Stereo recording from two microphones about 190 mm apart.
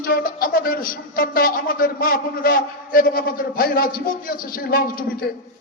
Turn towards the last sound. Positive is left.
turn(degrees=50)  # may be behind; listen again after turning